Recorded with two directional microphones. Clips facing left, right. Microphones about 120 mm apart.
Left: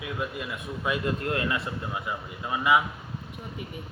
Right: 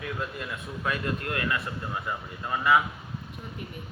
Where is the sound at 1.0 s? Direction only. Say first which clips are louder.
Left 2 dB; 25° left (ahead or behind).